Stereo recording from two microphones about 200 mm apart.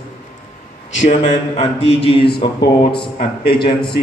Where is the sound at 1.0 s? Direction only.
35° left (ahead or behind).